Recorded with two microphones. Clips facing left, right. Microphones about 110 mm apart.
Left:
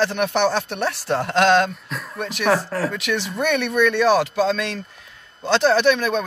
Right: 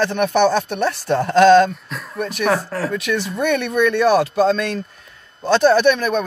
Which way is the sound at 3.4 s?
45° right (ahead or behind).